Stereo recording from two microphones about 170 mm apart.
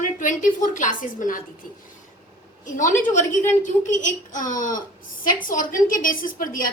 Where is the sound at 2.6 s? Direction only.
50° left (ahead or behind).